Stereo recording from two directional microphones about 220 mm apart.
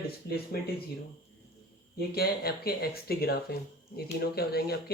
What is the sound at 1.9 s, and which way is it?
Speech, 45° left (ahead or behind).